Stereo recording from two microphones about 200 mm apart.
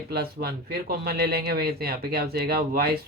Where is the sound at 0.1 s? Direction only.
50° right (ahead or behind).